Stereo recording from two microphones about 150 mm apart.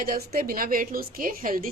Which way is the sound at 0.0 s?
70° right (ahead or behind).